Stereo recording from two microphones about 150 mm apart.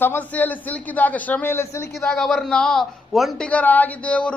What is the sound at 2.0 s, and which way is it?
A man's voice, centre (ahead or behind).